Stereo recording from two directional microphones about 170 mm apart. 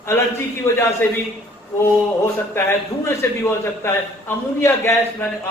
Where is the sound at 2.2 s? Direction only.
15° left (ahead or behind).